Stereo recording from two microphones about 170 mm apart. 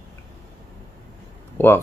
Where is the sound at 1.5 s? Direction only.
15° left (ahead or behind).